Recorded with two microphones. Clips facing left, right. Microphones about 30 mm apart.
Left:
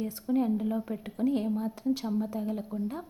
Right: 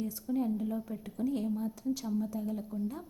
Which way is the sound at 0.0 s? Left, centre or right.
Left.